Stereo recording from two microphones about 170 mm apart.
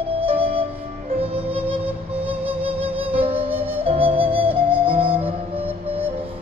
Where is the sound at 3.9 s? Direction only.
35° right (ahead or behind).